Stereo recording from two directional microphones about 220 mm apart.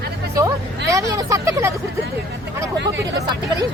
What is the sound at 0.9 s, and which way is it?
Speech, 15° right (ahead or behind).